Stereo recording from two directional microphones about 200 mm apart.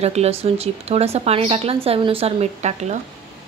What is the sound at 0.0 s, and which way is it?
A woman's voice, 30° right (ahead or behind).